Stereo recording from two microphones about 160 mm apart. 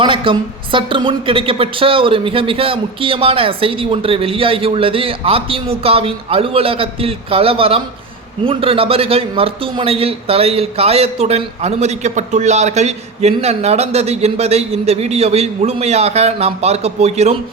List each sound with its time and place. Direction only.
0.0 s a man's voice: 30° right (ahead or behind)